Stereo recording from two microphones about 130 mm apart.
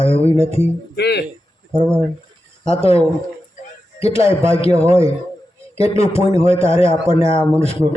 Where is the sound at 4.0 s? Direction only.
50° left (ahead or behind).